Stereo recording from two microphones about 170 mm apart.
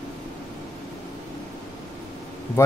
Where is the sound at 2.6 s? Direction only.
15° left (ahead or behind).